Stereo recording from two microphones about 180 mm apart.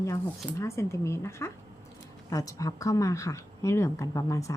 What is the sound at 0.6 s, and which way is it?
Speech, 15° left (ahead or behind).